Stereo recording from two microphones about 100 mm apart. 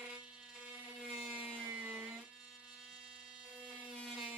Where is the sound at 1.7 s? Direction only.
15° right (ahead or behind).